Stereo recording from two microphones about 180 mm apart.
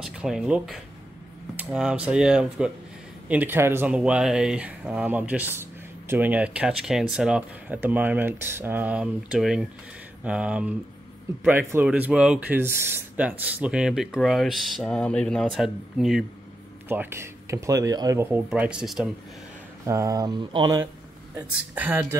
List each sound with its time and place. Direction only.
0.0 s speech: 5° right (ahead or behind)
19.9 s speech: 20° right (ahead or behind)
21.4 s speech: 10° right (ahead or behind)